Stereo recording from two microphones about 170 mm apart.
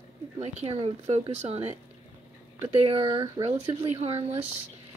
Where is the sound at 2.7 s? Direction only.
35° right (ahead or behind).